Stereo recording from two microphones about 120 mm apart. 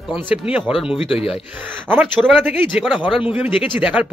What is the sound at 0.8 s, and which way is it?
Speech, 50° left (ahead or behind).